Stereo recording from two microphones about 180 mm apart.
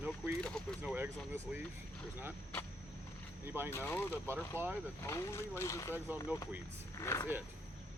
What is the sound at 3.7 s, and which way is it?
Speech, 15° left (ahead or behind).